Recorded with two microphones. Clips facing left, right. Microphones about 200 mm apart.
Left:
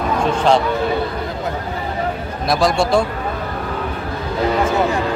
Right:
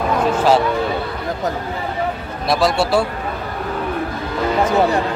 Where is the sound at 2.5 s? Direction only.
5° right (ahead or behind).